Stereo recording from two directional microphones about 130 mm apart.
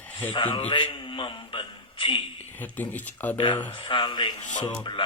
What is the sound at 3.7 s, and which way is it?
Speech, 40° left (ahead or behind).